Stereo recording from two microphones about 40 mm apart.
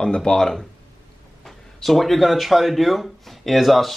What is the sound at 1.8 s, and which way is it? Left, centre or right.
Speech, centre.